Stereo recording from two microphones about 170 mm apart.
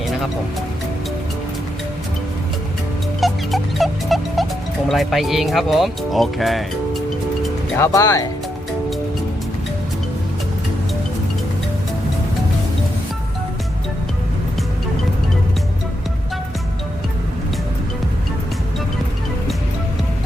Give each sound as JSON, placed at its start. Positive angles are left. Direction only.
{"t": 3.2, "sound": "music", "side_deg": 0}
{"t": 4.9, "sound": "speech", "side_deg": 0}
{"t": 7.8, "sound": "speech", "side_deg": 20}